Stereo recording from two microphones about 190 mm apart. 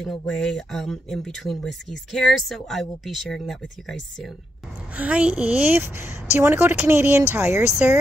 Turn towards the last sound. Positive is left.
turn(degrees=-10)  # may be behind; listen again after turning